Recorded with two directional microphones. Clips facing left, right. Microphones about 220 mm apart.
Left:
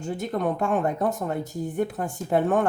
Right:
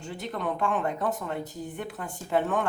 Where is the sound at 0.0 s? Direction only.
45° left (ahead or behind).